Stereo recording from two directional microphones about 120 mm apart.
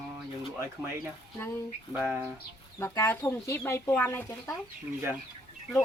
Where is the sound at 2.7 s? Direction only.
25° left (ahead or behind).